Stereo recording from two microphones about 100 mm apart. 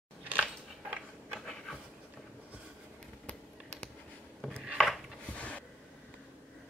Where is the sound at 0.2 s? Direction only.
15° right (ahead or behind).